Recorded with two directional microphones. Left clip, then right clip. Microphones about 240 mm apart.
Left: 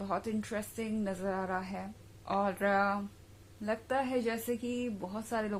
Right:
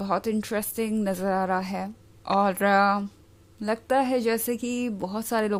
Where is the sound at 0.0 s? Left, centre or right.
Right.